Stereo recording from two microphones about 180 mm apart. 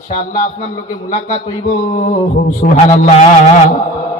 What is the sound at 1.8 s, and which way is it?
A man's voice, 45° left (ahead or behind).